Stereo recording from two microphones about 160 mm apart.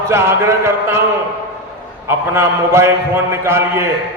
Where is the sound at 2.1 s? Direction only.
15° right (ahead or behind).